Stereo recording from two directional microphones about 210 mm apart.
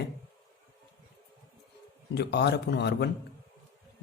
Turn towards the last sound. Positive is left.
turn(degrees=55)  # may be behind; listen again after turning